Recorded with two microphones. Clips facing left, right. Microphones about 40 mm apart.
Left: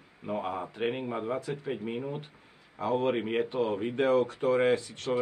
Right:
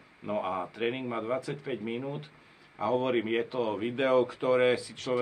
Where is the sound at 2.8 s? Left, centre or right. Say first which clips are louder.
Even; centre.